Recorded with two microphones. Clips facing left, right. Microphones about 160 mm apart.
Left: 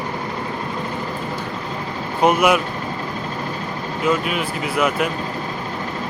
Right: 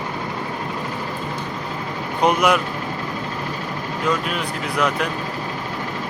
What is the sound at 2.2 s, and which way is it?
Speech, 5° left (ahead or behind).